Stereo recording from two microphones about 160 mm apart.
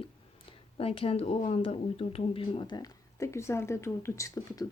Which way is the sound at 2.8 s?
20° left (ahead or behind).